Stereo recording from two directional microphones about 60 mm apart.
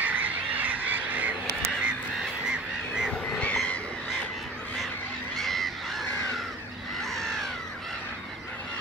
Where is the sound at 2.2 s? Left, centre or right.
Centre.